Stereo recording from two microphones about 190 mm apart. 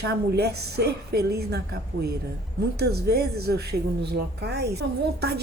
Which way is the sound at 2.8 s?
55° right (ahead or behind).